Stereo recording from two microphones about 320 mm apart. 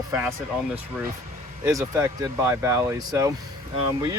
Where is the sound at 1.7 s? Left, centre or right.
Centre.